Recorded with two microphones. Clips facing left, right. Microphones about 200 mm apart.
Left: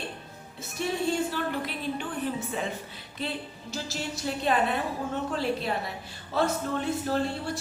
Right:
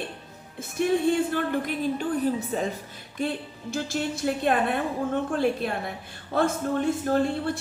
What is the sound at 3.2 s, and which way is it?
A woman's voice, 50° right (ahead or behind).